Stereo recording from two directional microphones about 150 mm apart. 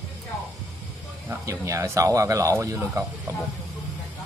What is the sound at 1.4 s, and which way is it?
Speech, 20° right (ahead or behind).